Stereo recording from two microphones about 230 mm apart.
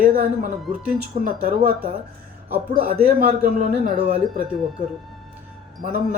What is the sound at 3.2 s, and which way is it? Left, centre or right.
Speech, right.